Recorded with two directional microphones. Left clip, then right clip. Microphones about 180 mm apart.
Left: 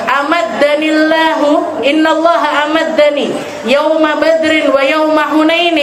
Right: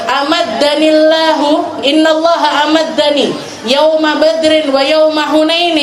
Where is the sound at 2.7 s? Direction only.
50° right (ahead or behind).